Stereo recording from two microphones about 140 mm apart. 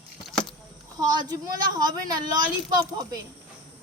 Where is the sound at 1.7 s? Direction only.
30° right (ahead or behind).